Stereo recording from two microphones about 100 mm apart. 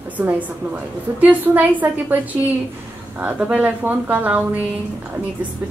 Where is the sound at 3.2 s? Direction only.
15° right (ahead or behind).